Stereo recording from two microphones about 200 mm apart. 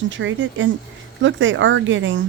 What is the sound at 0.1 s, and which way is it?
Speech, 70° right (ahead or behind).